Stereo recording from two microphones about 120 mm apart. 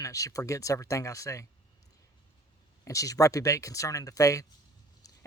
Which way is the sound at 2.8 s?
25° left (ahead or behind).